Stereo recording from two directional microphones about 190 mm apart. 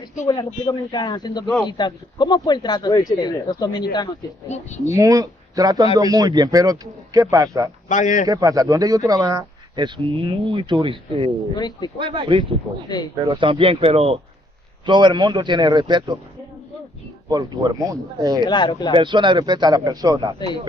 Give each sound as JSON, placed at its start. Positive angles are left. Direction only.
{"t": 0.3, "sound": "speech", "side_deg": 25}
{"t": 4.5, "sound": "speech", "side_deg": 35}
{"t": 4.9, "sound": "speech", "side_deg": -15}
{"t": 7.9, "sound": "speech", "side_deg": 40}
{"t": 8.3, "sound": "speech", "side_deg": -20}
{"t": 11.5, "sound": "speech", "side_deg": 20}
{"t": 12.0, "sound": "speech", "side_deg": -25}
{"t": 17.3, "sound": "speech", "side_deg": -20}
{"t": 18.4, "sound": "speech", "side_deg": 25}
{"t": 18.9, "sound": "speech", "side_deg": -25}